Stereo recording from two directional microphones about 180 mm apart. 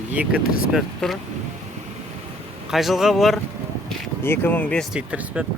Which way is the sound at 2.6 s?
Centre (ahead or behind).